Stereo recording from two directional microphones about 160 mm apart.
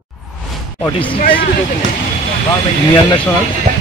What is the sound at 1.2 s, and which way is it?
Speech, 60° left (ahead or behind).